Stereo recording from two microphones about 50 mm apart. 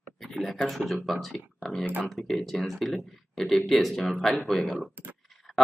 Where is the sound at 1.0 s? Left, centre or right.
Centre.